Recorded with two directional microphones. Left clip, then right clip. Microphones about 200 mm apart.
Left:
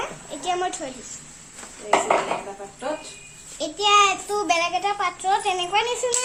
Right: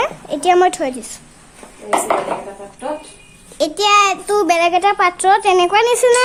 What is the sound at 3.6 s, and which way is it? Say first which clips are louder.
A child's voice: right 5 dB; 55° right (ahead or behind).